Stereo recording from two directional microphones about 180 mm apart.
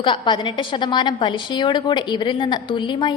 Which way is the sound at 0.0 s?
25° left (ahead or behind).